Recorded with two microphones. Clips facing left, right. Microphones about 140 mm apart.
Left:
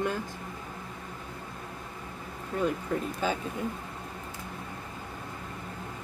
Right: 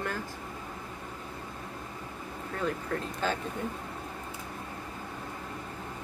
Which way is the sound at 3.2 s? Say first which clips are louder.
Left 1 dB; 10° left (ahead or behind).